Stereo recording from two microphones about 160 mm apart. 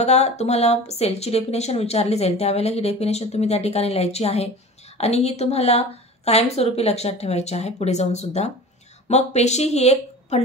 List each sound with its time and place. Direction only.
0.0 s speech: 45° left (ahead or behind)